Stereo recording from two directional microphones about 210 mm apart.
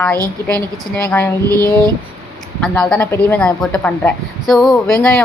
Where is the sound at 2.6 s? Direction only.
5° left (ahead or behind).